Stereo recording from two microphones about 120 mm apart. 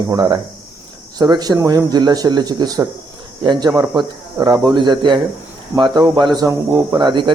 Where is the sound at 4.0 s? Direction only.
40° right (ahead or behind).